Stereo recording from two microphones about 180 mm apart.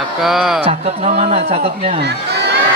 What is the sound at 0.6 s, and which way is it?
A man's voice, 35° right (ahead or behind).